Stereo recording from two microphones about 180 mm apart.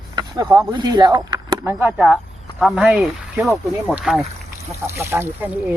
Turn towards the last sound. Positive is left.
turn(degrees=-10)  # may be behind; listen again after turning